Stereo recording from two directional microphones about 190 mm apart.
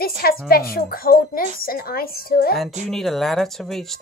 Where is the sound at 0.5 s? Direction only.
50° left (ahead or behind).